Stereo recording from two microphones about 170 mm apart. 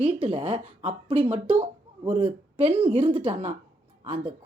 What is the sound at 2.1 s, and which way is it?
Speech, 30° right (ahead or behind).